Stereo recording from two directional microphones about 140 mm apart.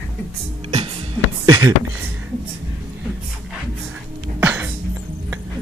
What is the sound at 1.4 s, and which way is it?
Speech, 25° right (ahead or behind).